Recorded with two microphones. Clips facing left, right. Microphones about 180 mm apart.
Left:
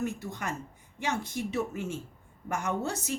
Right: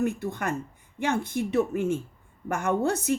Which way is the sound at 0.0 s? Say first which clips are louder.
Right 6 dB; 55° right (ahead or behind).